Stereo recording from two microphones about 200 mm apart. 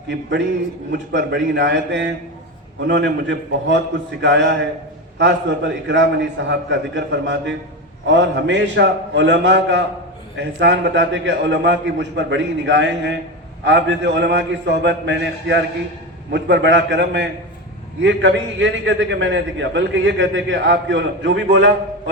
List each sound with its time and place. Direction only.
0.1 s a man's voice: 60° right (ahead or behind)